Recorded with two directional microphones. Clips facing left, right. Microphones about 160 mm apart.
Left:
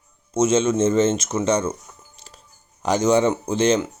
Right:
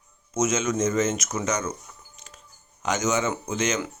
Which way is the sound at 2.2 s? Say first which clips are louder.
Left 1 dB; 35° left (ahead or behind).